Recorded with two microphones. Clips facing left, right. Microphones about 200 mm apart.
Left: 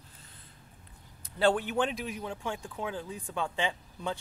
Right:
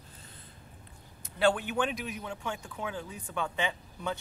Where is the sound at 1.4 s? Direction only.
35° left (ahead or behind).